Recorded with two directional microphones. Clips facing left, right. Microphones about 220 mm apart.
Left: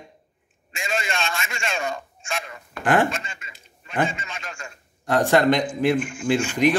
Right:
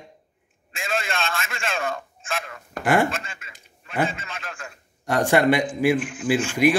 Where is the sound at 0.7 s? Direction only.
Centre (ahead or behind).